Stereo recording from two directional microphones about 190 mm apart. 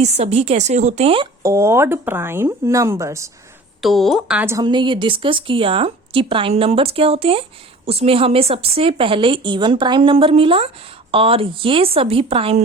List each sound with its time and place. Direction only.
0.0 s a woman's voice: 35° right (ahead or behind)
1.4 s speech: 15° right (ahead or behind)
3.8 s speech: centre (ahead or behind); by 12.6 s 30° right (ahead or behind)